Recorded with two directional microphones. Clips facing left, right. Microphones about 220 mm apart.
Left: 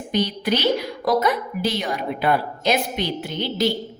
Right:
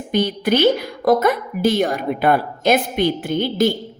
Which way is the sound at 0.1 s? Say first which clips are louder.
Right 4 dB; 50° right (ahead or behind).